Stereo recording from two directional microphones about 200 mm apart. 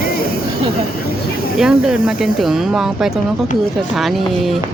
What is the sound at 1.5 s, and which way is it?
Speech, 5° right (ahead or behind).